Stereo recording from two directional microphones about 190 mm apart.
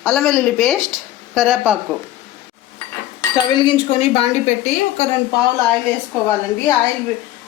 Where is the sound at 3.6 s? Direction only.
30° left (ahead or behind).